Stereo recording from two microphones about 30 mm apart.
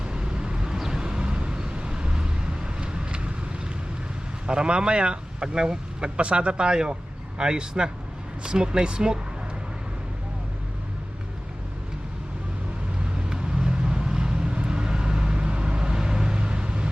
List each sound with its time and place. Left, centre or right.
0.0 s vehicle: right
0.8 s vehicle: centre
1.0 s vehicle: right
4.4 s speech: right
6.1 s speech: right
13.1 s vehicle: right
16.0 s vehicle: right